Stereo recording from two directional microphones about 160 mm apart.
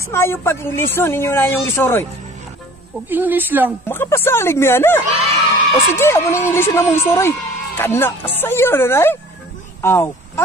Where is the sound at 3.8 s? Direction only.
15° left (ahead or behind).